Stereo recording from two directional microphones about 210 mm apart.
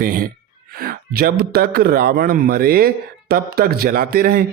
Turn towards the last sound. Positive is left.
turn(degrees=-45)  # may be behind; listen again after turning